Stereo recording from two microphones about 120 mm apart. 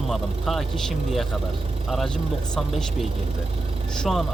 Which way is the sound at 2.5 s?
5° left (ahead or behind).